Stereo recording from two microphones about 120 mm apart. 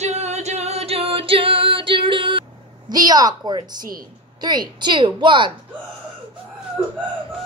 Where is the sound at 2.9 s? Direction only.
35° right (ahead or behind).